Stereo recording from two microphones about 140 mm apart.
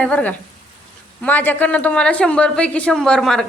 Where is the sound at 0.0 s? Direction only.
10° left (ahead or behind).